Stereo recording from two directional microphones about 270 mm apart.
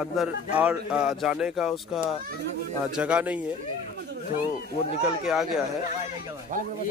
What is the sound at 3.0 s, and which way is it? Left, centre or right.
Speech, centre.